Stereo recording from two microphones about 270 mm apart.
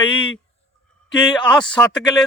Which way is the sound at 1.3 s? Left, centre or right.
Centre.